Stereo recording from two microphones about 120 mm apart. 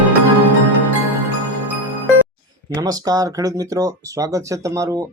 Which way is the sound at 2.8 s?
30° right (ahead or behind).